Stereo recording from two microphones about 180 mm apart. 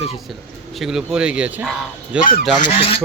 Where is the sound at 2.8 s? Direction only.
30° left (ahead or behind).